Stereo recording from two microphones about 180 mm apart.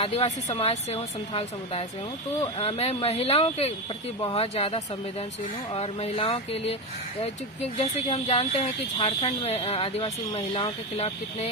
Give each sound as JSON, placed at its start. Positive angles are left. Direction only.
{"t": 0.0, "sound": "speech", "side_deg": 35}
{"t": 7.8, "sound": "speech", "side_deg": 35}